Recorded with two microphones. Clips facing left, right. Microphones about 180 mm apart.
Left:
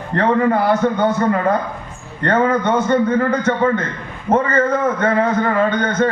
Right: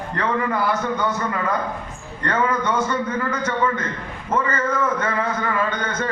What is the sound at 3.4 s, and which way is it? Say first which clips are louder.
Speech: left 6 dB; 45° left (ahead or behind).